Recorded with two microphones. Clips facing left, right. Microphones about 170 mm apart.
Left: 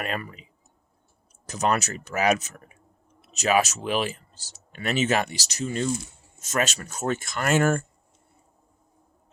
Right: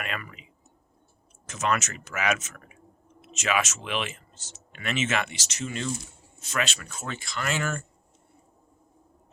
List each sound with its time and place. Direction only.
0.0 s speech: 35° left (ahead or behind)